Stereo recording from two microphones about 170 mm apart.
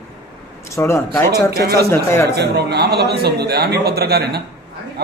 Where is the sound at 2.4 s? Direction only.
75° right (ahead or behind).